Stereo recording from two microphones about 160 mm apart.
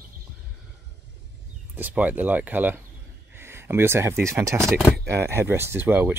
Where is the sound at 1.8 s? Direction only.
10° right (ahead or behind).